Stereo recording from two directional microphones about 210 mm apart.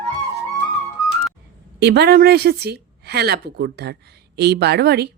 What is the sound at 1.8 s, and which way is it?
A woman's voice, 50° right (ahead or behind).